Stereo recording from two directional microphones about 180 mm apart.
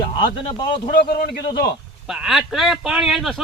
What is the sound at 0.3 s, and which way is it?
Speech, 25° left (ahead or behind).